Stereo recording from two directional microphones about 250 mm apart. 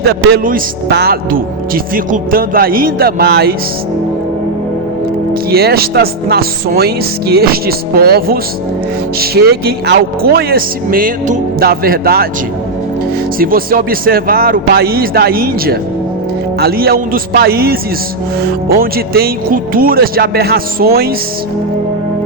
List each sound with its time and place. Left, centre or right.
0.1 s a man's voice: right
5.3 s a man's voice: right
13.4 s a man's voice: right